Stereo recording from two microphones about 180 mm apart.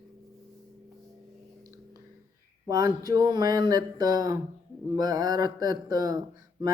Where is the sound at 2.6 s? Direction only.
20° right (ahead or behind).